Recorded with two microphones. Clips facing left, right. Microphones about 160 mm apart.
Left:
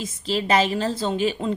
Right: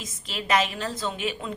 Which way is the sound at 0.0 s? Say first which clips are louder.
Left 10 dB; 30° left (ahead or behind).